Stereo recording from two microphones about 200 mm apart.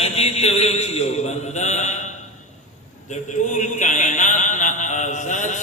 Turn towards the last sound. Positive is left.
turn(degrees=35)  # may be behind; listen again after turning